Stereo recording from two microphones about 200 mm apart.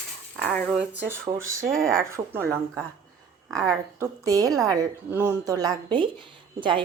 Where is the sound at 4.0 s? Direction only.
15° right (ahead or behind).